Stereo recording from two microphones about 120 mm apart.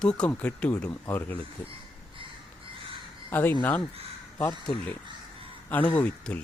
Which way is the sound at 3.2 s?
15° left (ahead or behind).